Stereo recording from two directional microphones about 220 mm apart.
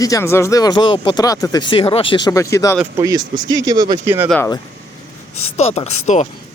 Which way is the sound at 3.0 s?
20° right (ahead or behind).